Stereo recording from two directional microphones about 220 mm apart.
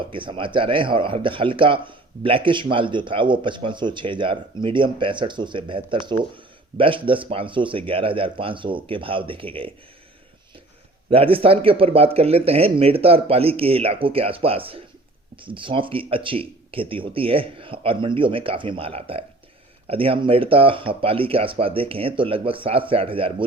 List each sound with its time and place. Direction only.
0.1 s speech: 25° right (ahead or behind)
11.1 s speech: 25° right (ahead or behind)